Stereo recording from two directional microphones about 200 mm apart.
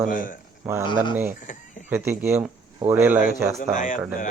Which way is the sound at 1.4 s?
40° left (ahead or behind).